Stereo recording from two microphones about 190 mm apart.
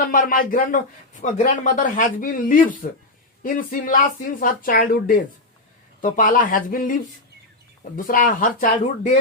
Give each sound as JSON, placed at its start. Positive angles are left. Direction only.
{"t": 0.0, "sound": "speech", "side_deg": 45}